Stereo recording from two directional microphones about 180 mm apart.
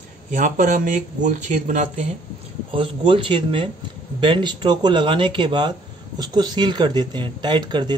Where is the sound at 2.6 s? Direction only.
30° right (ahead or behind).